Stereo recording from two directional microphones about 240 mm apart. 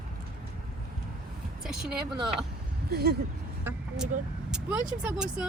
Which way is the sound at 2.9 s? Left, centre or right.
Right.